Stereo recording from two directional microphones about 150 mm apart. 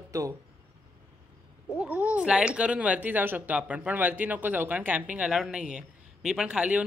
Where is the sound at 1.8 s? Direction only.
10° right (ahead or behind).